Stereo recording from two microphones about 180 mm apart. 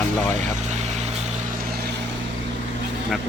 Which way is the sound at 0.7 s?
40° right (ahead or behind).